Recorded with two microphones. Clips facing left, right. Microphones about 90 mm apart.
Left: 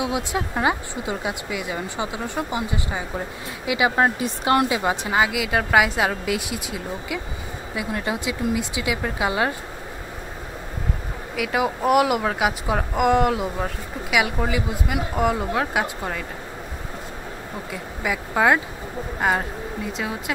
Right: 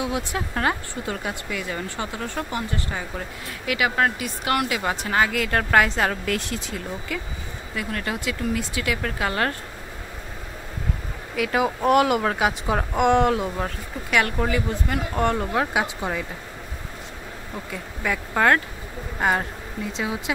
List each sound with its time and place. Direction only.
0.0 s speech: 20° left (ahead or behind)
11.3 s speech: 5° left (ahead or behind)
17.6 s speech: 5° left (ahead or behind)